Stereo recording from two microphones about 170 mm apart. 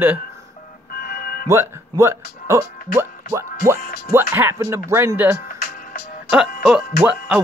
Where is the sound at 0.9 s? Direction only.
65° left (ahead or behind).